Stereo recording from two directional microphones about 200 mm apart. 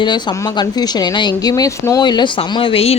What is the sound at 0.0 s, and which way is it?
Speech, 20° left (ahead or behind).